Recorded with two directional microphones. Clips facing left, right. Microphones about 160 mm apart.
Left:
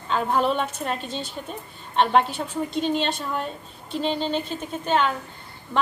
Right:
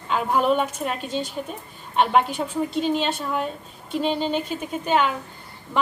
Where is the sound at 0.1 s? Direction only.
10° right (ahead or behind).